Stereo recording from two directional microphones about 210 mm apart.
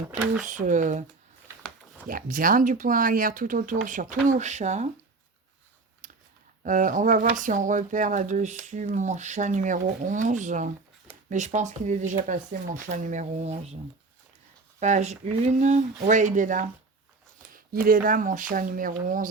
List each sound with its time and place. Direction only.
0.4 s speech: 35° right (ahead or behind)
1.6 s a sound: 5° left (ahead or behind)
2.0 s speech: 40° right (ahead or behind)
6.0 s a sound: 35° right (ahead or behind)
6.6 s speech: 40° right (ahead or behind)
14.8 s speech: 35° right (ahead or behind)